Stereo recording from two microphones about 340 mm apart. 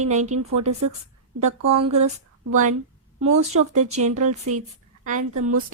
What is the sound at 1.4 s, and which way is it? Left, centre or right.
Speech, right.